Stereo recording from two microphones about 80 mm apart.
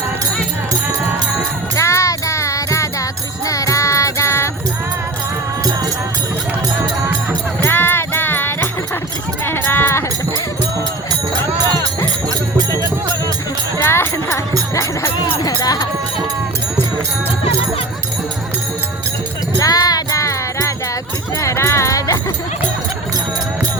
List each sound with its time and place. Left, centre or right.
1.7 s music: left
6.8 s music: right
7.6 s music: left
9.4 s sheep: left
13.8 s music: left
15.2 s music: left
19.5 s music: left